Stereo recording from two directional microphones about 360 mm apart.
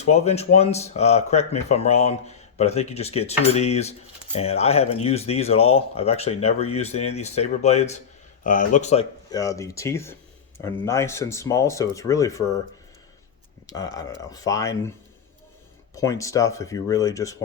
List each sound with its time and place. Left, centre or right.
0.0 s speech: centre
13.7 s speech: centre
16.0 s speech: centre